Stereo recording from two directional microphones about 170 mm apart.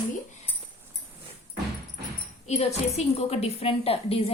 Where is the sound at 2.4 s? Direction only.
40° left (ahead or behind).